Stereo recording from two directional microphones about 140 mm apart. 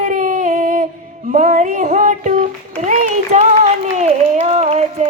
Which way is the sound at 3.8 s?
55° right (ahead or behind).